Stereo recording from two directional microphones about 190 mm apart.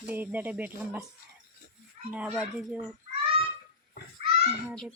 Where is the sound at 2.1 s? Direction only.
5° right (ahead or behind).